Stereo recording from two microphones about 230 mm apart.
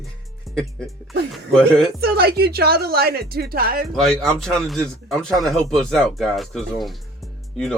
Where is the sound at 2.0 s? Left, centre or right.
Right.